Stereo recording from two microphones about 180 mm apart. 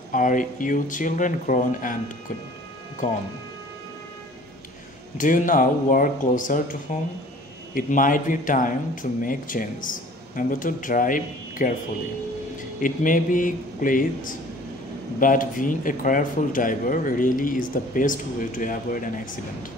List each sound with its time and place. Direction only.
0.1 s speech: 45° left (ahead or behind)
3.0 s speech: 45° left (ahead or behind)
5.1 s speech: 45° left (ahead or behind)
12.8 s speech: 50° left (ahead or behind)